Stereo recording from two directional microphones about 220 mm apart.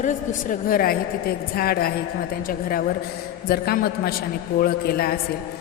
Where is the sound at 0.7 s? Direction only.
40° left (ahead or behind).